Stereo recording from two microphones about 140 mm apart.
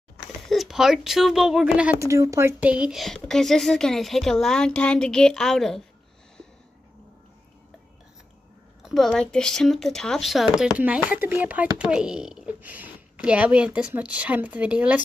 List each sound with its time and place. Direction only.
0.4 s speech: centre (ahead or behind)
2.0 s speech: 20° right (ahead or behind)
2.6 s speech: 5° right (ahead or behind)
8.8 s speech: centre (ahead or behind)